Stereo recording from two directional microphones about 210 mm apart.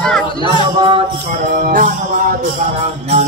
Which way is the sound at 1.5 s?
40° right (ahead or behind).